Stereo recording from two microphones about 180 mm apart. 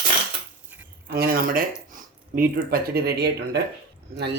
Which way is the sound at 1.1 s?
55° right (ahead or behind).